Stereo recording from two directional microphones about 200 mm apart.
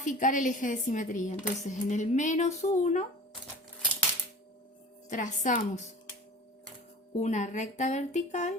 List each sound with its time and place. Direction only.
0.0 s speech: 40° left (ahead or behind)
5.0 s speech: 40° left (ahead or behind)
7.2 s speech: 35° left (ahead or behind)